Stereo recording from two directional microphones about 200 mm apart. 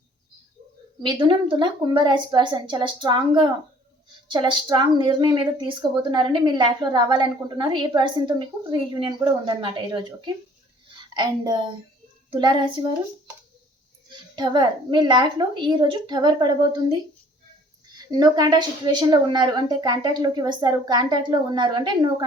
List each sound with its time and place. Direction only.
1.0 s a woman's voice: 25° right (ahead or behind)
14.1 s a woman's voice: 20° right (ahead or behind)